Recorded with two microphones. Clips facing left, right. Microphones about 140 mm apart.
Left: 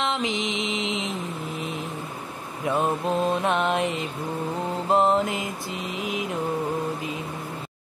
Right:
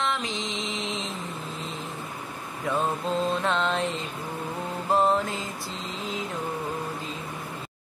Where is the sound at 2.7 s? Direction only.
20° left (ahead or behind).